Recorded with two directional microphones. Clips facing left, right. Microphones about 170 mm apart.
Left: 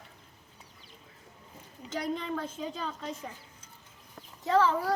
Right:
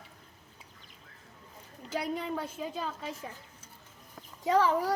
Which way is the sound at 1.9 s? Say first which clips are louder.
Even; 10° right (ahead or behind).